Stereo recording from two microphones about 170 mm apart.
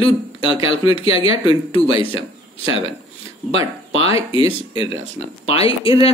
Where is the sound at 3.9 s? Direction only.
35° left (ahead or behind).